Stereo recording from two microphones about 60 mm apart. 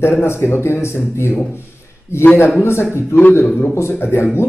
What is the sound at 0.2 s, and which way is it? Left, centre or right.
A man's voice, left.